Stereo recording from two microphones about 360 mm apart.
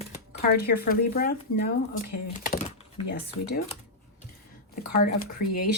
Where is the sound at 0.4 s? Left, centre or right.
Left.